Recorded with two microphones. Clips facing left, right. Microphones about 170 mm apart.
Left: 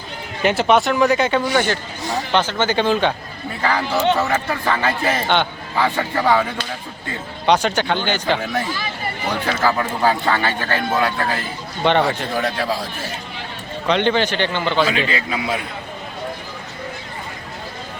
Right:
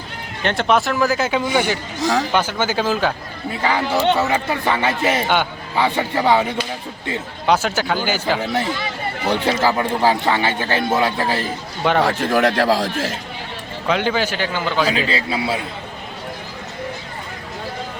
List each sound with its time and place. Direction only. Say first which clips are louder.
0.4 s a man's voice: left 2 dB; 5° left (ahead or behind)
1.5 s speech: even; 15° right (ahead or behind)
2.0 s speech: right 5 dB; 90° right
2.3 s a man's voice: left 1 dB; 10° right (ahead or behind)
3.6 s a man's voice: right 1 dB; 20° right (ahead or behind)
7.4 s a man's voice: left 1 dB; 5° right (ahead or behind)
9.3 s a man's voice: right 2 dB; 25° right (ahead or behind)
11.8 s a man's voice: left 1 dB; centre (ahead or behind)
12.0 s speech: right 4 dB; 90° right
13.8 s a man's voice: left 2 dB; 5° right (ahead or behind)
14.8 s a man's voice: right 1 dB; 35° right (ahead or behind)